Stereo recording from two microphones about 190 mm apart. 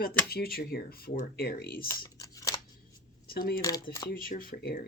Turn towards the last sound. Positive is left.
turn(degrees=55)  # may be behind; listen again after turning